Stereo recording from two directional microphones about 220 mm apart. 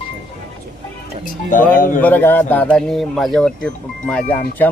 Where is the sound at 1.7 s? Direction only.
40° left (ahead or behind).